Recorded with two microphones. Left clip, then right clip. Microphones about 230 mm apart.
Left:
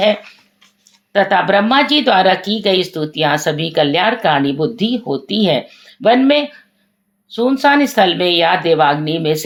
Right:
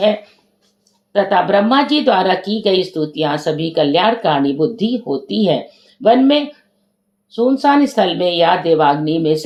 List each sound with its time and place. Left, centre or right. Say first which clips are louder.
1.1 s speech: left 1 dB; left